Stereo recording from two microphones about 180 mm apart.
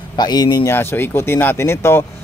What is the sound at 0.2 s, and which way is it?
A man's voice, 25° left (ahead or behind).